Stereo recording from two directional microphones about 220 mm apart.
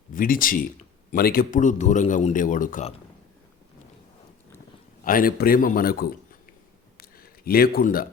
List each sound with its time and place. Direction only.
0.1 s a man's voice: 40° left (ahead or behind)
5.0 s a man's voice: 40° left (ahead or behind)
6.9 s a sound: 45° left (ahead or behind)